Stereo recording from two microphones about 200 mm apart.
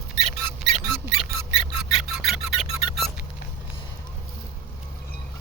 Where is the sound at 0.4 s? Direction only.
5° left (ahead or behind).